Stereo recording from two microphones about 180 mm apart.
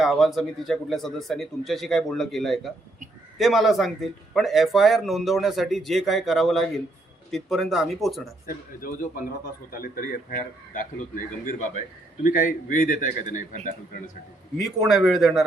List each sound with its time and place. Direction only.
0.0 s speech: centre (ahead or behind)
8.4 s a man's voice: 50° left (ahead or behind)
12.2 s a man's voice: 45° left (ahead or behind)
14.8 s speech: centre (ahead or behind)